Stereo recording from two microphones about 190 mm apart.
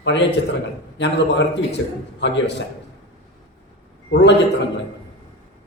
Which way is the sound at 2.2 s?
70° left (ahead or behind).